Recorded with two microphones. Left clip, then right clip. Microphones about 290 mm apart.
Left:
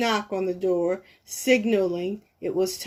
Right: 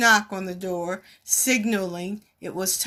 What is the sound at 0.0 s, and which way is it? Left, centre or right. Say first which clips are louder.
Speech: right 6 dB; right.